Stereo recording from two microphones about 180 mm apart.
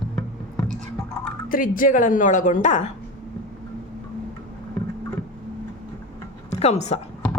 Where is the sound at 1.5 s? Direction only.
50° left (ahead or behind).